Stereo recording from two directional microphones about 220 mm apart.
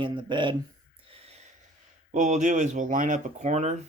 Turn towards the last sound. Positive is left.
turn(degrees=-30)  # may be behind; listen again after turning